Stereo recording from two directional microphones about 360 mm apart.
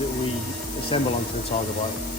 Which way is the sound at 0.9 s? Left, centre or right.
Centre.